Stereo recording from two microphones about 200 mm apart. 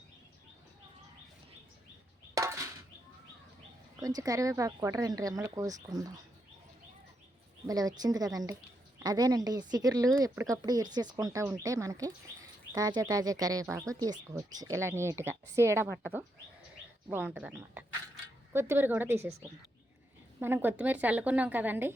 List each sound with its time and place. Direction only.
2.3 s a sound: 15° right (ahead or behind)
4.0 s speech: 15° right (ahead or behind)
7.7 s speech: 20° right (ahead or behind)
17.1 s speech: 10° right (ahead or behind)
20.4 s speech: 10° right (ahead or behind)